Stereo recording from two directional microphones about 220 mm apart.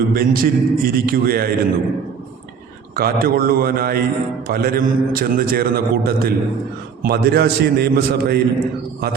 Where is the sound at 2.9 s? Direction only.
40° right (ahead or behind).